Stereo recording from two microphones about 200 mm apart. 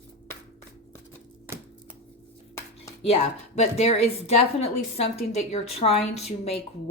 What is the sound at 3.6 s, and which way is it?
A woman's voice, 30° left (ahead or behind).